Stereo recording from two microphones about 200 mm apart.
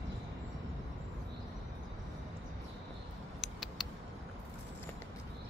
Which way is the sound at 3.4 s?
Centre (ahead or behind).